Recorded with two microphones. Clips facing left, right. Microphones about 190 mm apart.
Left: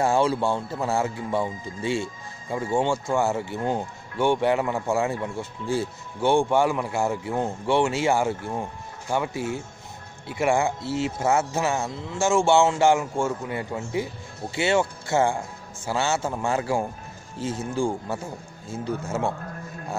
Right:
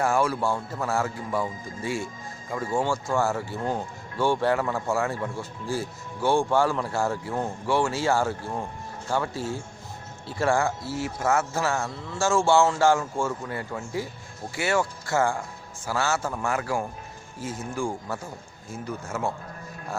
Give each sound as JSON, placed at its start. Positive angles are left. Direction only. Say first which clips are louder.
{"t": 0.0, "sound": "speech", "louder": "left 2 dB", "side_deg": 25}